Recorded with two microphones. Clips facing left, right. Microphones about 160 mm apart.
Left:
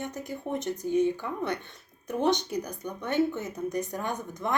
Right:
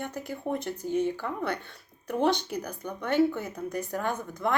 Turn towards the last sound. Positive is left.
turn(degrees=20)  # may be behind; listen again after turning